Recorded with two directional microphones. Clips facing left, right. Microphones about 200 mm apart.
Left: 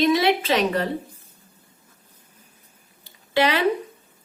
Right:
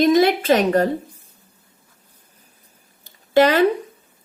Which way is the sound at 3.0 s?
45° right (ahead or behind).